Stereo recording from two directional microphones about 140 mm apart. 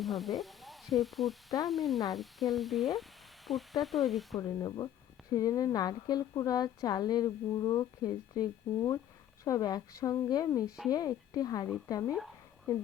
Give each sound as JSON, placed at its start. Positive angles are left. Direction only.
{"t": 0.0, "sound": "speech", "side_deg": 0}
{"t": 4.4, "sound": "a woman's voice", "side_deg": 25}